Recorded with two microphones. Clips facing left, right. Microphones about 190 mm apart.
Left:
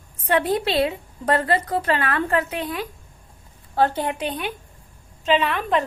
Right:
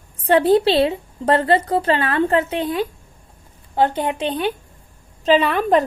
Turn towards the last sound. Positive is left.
turn(degrees=-40)  # may be behind; listen again after turning